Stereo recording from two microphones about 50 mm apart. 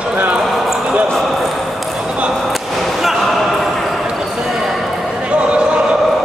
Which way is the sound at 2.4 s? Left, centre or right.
Centre.